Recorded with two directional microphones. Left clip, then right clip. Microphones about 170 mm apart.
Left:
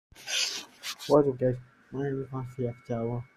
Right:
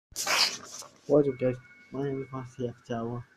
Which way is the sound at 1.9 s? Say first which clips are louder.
Even; 15° left (ahead or behind).